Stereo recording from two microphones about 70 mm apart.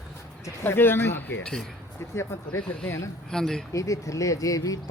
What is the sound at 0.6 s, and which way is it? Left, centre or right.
Speech, left.